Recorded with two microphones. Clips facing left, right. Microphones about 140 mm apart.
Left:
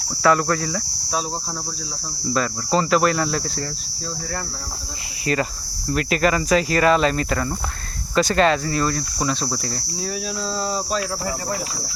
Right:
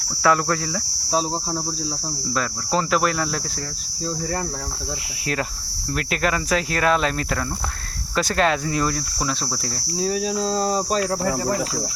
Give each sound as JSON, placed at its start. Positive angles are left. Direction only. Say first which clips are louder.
{"t": 0.2, "sound": "speech", "louder": "left 2 dB", "side_deg": -5}
{"t": 2.3, "sound": "speech", "louder": "left 3 dB", "side_deg": 0}
{"t": 5.2, "sound": "speech", "louder": "left 5 dB", "side_deg": 0}
{"t": 10.0, "sound": "cricket", "louder": "right 6 dB", "side_deg": -25}
{"t": 10.5, "sound": "speech", "louder": "right 1 dB", "side_deg": -40}